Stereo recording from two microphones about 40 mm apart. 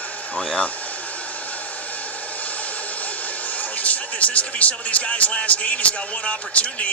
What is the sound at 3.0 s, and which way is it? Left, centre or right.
Speech, left.